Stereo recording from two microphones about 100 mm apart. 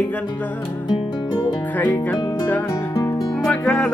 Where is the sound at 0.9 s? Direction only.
50° left (ahead or behind).